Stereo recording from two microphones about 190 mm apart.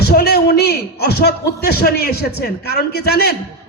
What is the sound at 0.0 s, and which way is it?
Speech, 55° left (ahead or behind).